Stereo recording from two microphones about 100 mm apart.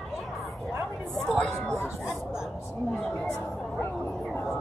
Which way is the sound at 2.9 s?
5° left (ahead or behind).